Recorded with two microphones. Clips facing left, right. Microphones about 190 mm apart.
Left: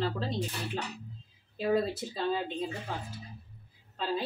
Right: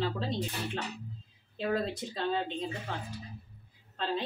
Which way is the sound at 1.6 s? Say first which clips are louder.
Left 3 dB; 5° left (ahead or behind).